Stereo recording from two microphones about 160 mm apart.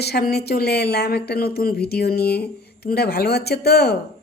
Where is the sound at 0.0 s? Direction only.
85° left.